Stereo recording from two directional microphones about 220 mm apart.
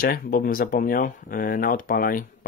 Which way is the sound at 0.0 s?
40° left (ahead or behind).